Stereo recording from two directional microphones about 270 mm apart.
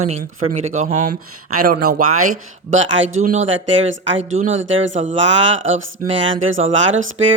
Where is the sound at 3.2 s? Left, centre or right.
Right.